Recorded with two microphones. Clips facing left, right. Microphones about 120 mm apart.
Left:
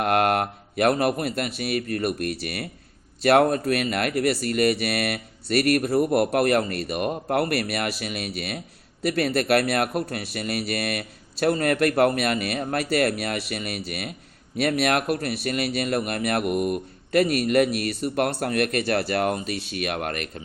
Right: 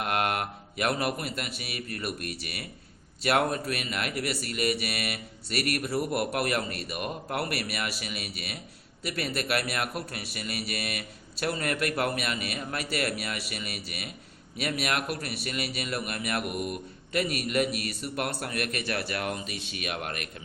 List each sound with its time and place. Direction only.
0.0 s a man's voice: 45° left (ahead or behind)